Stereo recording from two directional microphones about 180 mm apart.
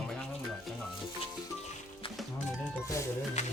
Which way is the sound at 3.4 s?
40° left (ahead or behind).